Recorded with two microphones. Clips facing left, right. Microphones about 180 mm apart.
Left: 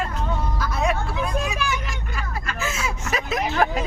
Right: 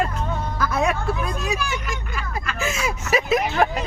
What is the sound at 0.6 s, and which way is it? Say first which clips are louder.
Music: right 4 dB; 50° right (ahead or behind).